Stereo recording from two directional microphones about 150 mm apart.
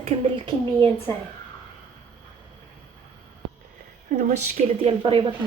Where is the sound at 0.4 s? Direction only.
30° right (ahead or behind).